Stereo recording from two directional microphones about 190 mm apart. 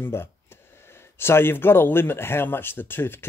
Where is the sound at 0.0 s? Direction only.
10° left (ahead or behind).